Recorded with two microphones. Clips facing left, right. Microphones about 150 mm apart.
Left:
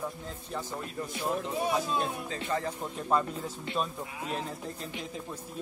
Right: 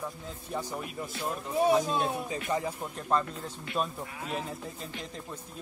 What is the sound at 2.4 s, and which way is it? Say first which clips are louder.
Music: even; 15° right (ahead or behind).